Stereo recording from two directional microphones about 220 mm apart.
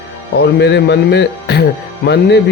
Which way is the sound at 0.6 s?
50° left (ahead or behind).